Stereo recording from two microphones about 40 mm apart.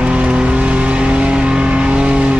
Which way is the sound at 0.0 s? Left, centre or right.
Right.